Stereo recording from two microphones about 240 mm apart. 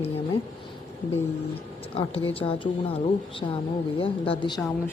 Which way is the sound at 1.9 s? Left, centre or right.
Left.